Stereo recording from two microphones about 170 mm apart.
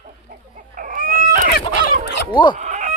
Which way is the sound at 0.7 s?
50° right (ahead or behind).